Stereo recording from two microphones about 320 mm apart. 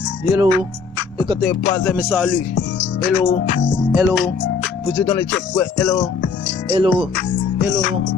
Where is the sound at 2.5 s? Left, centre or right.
Left.